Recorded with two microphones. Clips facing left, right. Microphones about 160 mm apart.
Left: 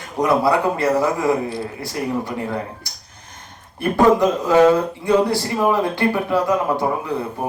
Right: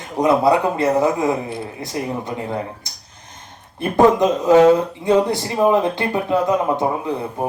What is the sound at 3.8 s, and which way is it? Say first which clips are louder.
Speech: right 1 dB; 20° right (ahead or behind).